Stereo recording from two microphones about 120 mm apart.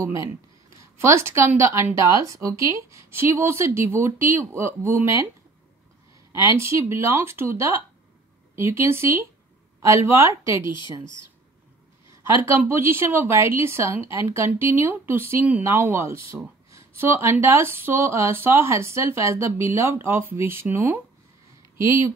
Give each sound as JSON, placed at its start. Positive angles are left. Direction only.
{"t": 0.0, "sound": "a woman's voice", "side_deg": -25}
{"t": 6.7, "sound": "a woman's voice", "side_deg": -25}
{"t": 12.1, "sound": "a woman's voice", "side_deg": -20}